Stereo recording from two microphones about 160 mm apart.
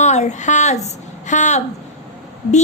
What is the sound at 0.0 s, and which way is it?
A woman's voice, 45° left (ahead or behind).